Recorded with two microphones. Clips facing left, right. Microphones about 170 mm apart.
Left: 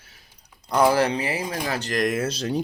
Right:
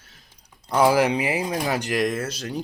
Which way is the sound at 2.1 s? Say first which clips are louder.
Left 4 dB; 20° left (ahead or behind).